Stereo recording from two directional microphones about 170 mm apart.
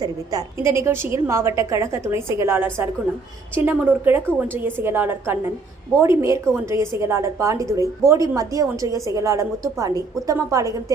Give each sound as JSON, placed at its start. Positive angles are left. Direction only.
{"t": 0.0, "sound": "a woman's voice", "side_deg": -20}